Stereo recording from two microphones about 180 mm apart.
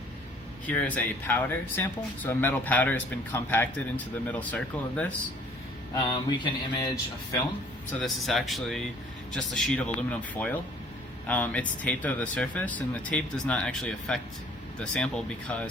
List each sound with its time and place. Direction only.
0.7 s speech: 10° left (ahead or behind)
5.9 s a sound: 25° left (ahead or behind)
7.9 s speech: centre (ahead or behind)